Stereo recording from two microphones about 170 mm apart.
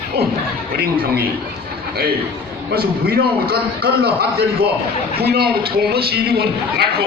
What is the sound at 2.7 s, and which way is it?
A man's voice, 65° right (ahead or behind).